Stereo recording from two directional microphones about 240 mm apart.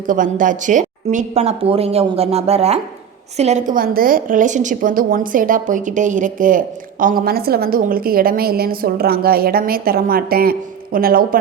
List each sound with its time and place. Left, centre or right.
0.1 s a woman's voice: right